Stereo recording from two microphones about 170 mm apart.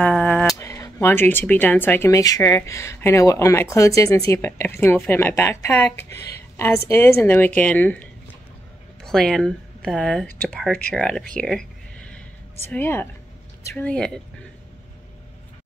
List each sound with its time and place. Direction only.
0.0 s a sound: 5° left (ahead or behind)
0.6 s speech: 15° left (ahead or behind)
12.6 s speech: 10° left (ahead or behind)